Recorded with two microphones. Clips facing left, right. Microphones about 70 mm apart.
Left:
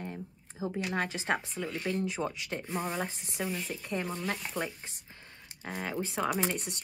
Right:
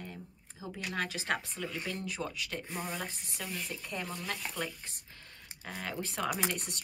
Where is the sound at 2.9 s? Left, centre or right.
Left.